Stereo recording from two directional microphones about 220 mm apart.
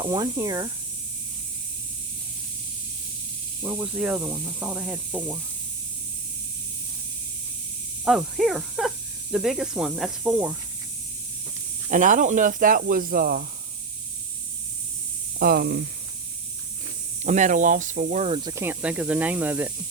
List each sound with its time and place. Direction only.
0.0 s speech: 20° right (ahead or behind)
3.6 s speech: 10° right (ahead or behind)
8.0 s speech: centre (ahead or behind)
11.9 s speech: 35° right (ahead or behind)
15.4 s speech: 45° right (ahead or behind)
17.2 s speech: 35° right (ahead or behind); by 19.7 s 5° right (ahead or behind)